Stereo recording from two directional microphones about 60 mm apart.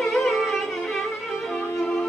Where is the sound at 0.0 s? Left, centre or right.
Centre.